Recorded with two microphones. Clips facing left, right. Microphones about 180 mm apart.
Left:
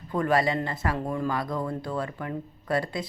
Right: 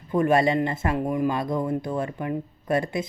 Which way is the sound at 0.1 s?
25° right (ahead or behind).